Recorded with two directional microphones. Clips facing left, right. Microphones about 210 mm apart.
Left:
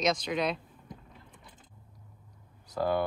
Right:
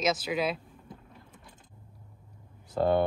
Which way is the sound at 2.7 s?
25° right (ahead or behind).